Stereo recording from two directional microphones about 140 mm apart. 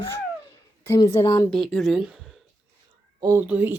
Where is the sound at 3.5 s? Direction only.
15° right (ahead or behind).